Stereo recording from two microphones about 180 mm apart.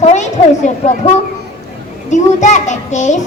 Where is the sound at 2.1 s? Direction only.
40° left (ahead or behind).